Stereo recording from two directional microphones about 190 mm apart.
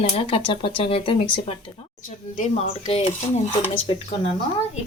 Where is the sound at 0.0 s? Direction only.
30° left (ahead or behind).